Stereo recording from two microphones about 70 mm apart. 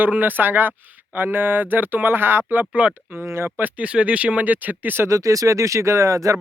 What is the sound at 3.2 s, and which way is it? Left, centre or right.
Speech, right.